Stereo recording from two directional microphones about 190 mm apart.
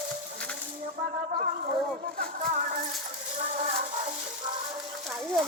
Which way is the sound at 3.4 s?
35° right (ahead or behind).